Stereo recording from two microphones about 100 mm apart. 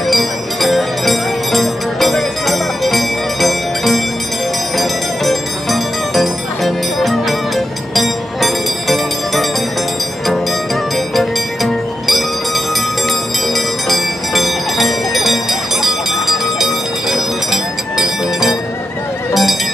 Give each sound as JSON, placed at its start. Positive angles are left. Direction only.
{"t": 0.1, "sound": "music", "side_deg": 0}
{"t": 11.1, "sound": "music", "side_deg": 0}
{"t": 13.5, "sound": "bell", "side_deg": 0}